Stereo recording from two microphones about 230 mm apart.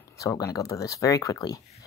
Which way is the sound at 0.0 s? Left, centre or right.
Centre.